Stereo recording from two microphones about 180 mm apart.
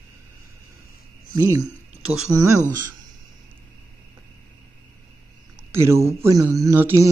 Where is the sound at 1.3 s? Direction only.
15° right (ahead or behind).